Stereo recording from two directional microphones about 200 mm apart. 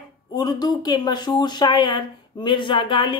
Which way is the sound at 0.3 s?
20° left (ahead or behind).